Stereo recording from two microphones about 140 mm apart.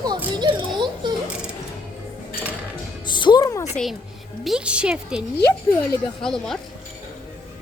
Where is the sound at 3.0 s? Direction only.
35° left (ahead or behind).